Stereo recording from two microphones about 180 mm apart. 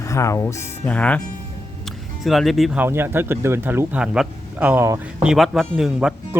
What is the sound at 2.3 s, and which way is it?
Speech, centre (ahead or behind).